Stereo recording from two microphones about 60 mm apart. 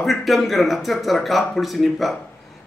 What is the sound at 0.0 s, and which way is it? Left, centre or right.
Speech, centre.